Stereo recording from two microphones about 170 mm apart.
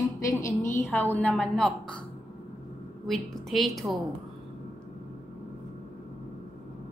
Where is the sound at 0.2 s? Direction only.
20° left (ahead or behind).